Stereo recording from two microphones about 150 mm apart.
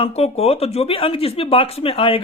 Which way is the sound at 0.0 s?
40° left (ahead or behind).